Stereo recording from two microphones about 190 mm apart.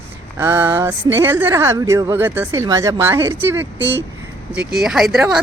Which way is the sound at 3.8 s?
70° right (ahead or behind).